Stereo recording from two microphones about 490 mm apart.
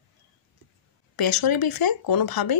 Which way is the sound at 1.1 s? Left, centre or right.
Left.